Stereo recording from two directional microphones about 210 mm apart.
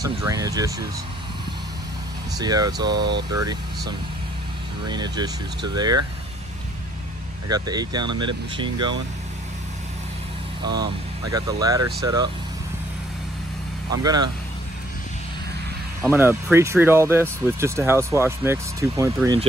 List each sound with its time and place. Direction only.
0.0 s speech: 15° right (ahead or behind)
2.3 s speech: 20° right (ahead or behind)
7.4 s speech: 20° right (ahead or behind)
10.6 s speech: 20° right (ahead or behind)
13.9 s speech: 20° right (ahead or behind)
16.0 s speech: 10° right (ahead or behind)